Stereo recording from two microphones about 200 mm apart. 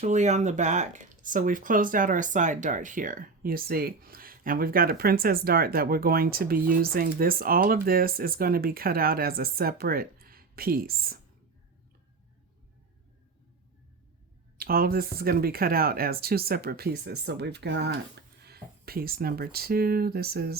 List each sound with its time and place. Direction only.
0.0 s speech: 35° right (ahead or behind)
14.6 s speech: 50° right (ahead or behind)